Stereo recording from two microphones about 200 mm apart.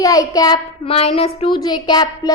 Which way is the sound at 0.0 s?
15° left (ahead or behind).